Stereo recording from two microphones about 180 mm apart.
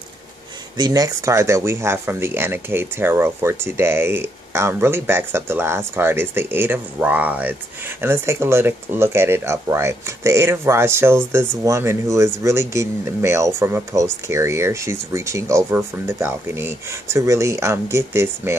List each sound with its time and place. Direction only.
0.7 s speech: 20° right (ahead or behind)